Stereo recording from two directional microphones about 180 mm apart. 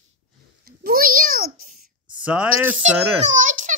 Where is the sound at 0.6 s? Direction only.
55° right (ahead or behind).